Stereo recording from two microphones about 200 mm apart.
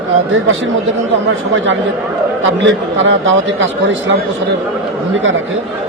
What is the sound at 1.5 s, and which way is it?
A man's voice, 65° right (ahead or behind).